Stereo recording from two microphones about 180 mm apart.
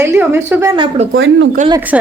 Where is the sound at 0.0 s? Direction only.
15° right (ahead or behind).